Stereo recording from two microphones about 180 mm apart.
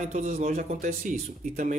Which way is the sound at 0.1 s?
45° right (ahead or behind).